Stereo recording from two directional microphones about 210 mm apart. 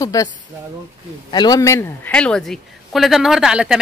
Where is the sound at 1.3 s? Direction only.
20° left (ahead or behind); by 3.8 s 5° right (ahead or behind).